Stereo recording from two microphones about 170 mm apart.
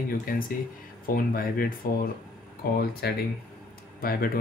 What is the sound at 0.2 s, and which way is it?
Speech, 55° left (ahead or behind).